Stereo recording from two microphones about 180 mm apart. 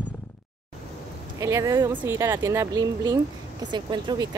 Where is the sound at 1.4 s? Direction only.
20° right (ahead or behind).